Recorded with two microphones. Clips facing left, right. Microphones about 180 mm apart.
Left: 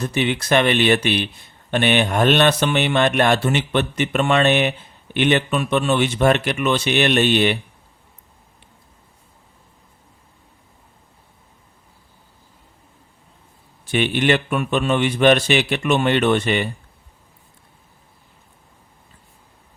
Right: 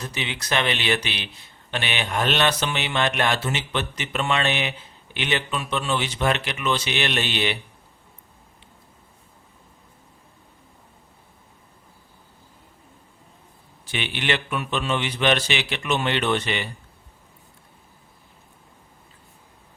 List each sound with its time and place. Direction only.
0.0 s speech: 55° left (ahead or behind)
13.9 s speech: 50° left (ahead or behind)